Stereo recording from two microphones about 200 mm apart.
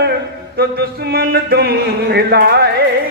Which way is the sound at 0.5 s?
55° right (ahead or behind).